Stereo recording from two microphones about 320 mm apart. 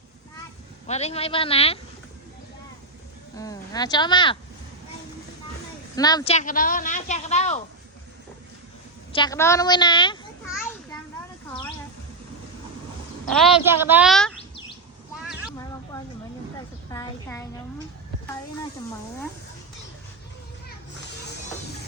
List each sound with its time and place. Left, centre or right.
0.9 s speech: centre
3.3 s speech: centre
6.0 s a woman's voice: centre
9.1 s speech: centre
13.3 s speech: centre
15.3 s a sound: centre
16.9 s a sound: centre